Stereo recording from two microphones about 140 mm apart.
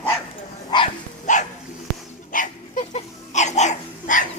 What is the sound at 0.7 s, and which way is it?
Dog, 30° left (ahead or behind).